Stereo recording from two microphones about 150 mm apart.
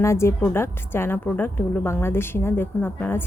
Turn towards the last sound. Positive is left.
turn(degrees=15)  # may be behind; listen again after turning